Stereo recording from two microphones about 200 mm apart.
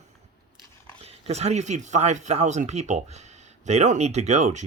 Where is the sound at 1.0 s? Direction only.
30° right (ahead or behind).